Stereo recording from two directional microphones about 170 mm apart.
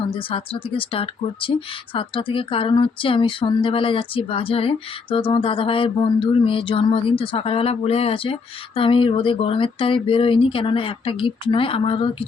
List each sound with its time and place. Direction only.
0.1 s speech: 30° left (ahead or behind)